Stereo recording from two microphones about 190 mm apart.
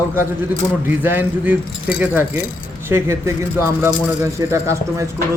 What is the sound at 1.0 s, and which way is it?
Speech, 10° right (ahead or behind).